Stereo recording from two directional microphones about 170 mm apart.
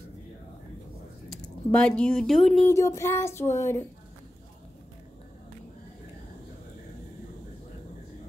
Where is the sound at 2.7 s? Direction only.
15° left (ahead or behind).